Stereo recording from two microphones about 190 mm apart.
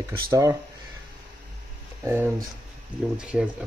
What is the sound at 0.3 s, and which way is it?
Speech, 15° right (ahead or behind).